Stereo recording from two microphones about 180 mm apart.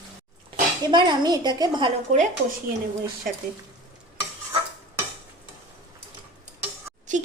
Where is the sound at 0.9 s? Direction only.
25° right (ahead or behind).